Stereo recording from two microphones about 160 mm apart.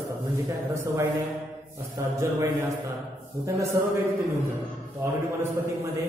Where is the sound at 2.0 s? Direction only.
20° right (ahead or behind).